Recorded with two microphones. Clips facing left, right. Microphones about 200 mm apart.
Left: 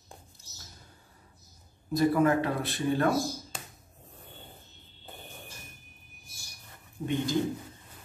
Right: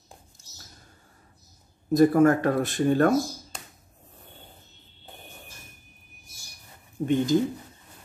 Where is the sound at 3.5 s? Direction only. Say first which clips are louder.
Left 1 dB; centre (ahead or behind).